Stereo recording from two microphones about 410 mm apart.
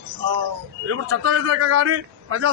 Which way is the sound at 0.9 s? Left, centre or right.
Right.